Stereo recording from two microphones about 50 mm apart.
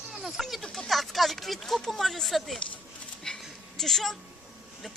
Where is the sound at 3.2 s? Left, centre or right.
Centre.